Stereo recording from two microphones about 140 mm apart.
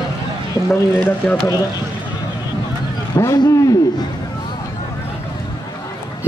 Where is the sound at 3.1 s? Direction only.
25° left (ahead or behind).